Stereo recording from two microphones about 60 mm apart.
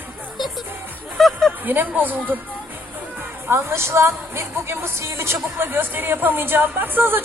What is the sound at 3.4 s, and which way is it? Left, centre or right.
A woman's voice, right.